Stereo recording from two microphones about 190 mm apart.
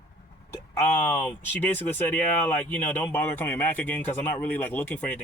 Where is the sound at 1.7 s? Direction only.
10° left (ahead or behind).